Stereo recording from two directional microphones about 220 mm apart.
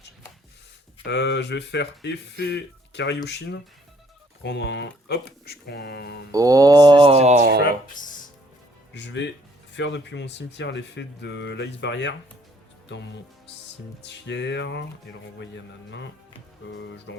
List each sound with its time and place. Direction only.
1.0 s speech: 50° left (ahead or behind)
6.3 s speech: 15° right (ahead or behind); by 7.6 s 40° right (ahead or behind)
8.9 s speech: 55° left (ahead or behind)
14.0 s speech: 50° left (ahead or behind)
16.6 s speech: 55° left (ahead or behind)